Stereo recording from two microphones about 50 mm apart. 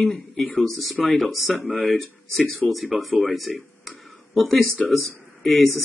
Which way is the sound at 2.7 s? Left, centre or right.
Centre.